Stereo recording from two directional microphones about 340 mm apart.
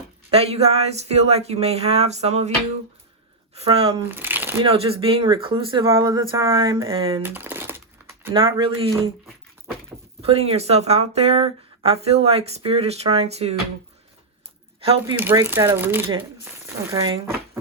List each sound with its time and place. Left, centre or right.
0.3 s speech: centre
3.5 s speech: centre
4.1 s crumpling: centre
4.6 s speech: centre
10.2 s speech: centre
14.8 s speech: centre